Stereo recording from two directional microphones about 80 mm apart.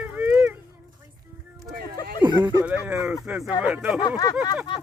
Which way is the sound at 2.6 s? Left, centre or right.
Centre.